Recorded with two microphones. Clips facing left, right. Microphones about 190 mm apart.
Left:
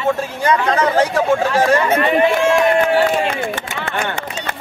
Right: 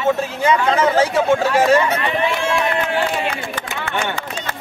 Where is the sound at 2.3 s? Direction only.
50° left (ahead or behind).